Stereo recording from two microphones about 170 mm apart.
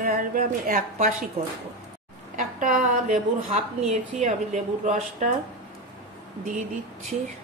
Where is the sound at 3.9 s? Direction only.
40° right (ahead or behind).